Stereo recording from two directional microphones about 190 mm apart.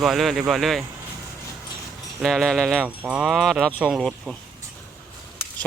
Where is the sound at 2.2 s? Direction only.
Centre (ahead or behind).